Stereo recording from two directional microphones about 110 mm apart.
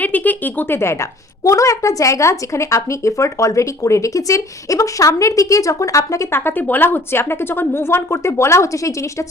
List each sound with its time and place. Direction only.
0.0 s speech: 15° left (ahead or behind)